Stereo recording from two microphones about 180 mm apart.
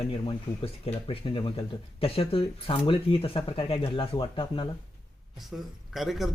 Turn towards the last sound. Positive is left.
turn(degrees=0)  # may be behind; listen again after turning